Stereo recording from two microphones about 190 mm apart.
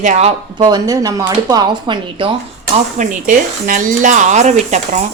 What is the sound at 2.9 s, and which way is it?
Speech, 40° right (ahead or behind).